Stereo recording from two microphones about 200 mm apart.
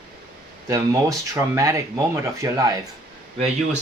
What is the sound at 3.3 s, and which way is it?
Speech, 30° right (ahead or behind).